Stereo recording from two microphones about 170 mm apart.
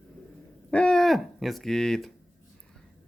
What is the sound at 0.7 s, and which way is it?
Owl, 5° left (ahead or behind).